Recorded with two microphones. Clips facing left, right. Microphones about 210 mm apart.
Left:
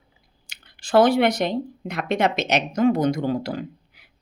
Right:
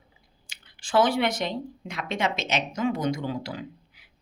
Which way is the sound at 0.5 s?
60° left (ahead or behind).